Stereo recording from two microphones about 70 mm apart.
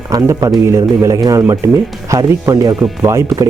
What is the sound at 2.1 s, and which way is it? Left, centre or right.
Speech, right.